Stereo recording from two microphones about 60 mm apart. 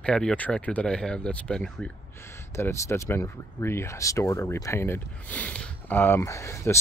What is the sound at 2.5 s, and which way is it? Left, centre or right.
Speech, left.